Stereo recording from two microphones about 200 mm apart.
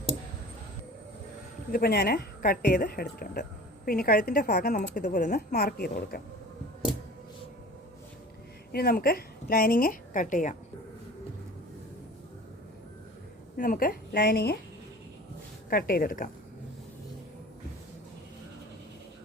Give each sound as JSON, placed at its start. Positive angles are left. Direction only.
{"t": 1.7, "sound": "a woman's voice", "side_deg": 50}
{"t": 8.7, "sound": "a woman's voice", "side_deg": 50}
{"t": 13.6, "sound": "a woman's voice", "side_deg": 45}
{"t": 15.7, "sound": "a woman's voice", "side_deg": 45}